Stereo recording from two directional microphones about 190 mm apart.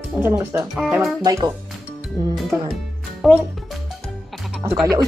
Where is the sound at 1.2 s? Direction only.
20° right (ahead or behind).